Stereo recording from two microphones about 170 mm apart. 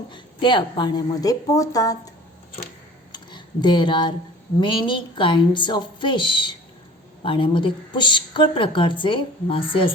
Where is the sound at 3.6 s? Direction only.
25° left (ahead or behind).